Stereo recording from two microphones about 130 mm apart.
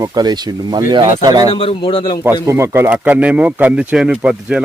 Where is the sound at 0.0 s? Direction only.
30° right (ahead or behind).